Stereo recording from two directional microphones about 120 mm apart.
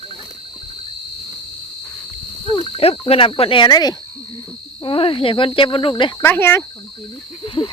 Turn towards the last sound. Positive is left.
turn(degrees=45)  # may be behind; listen again after turning